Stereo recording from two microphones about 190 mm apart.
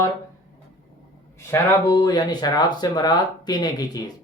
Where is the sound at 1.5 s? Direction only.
20° left (ahead or behind).